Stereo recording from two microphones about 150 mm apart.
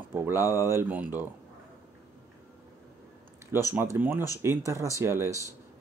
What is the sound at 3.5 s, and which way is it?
Speech, 15° right (ahead or behind).